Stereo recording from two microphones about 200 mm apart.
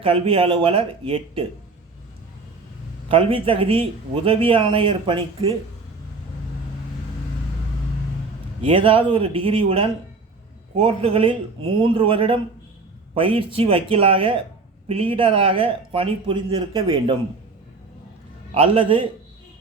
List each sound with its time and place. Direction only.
0.0 s speech: 25° right (ahead or behind)
3.1 s speech: 25° right (ahead or behind)
8.6 s speech: 25° right (ahead or behind)
18.5 s speech: 30° right (ahead or behind)